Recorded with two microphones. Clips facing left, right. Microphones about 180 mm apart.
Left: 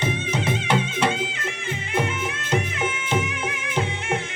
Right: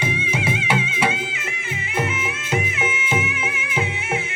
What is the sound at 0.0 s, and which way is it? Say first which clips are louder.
Music: even; 10° right (ahead or behind).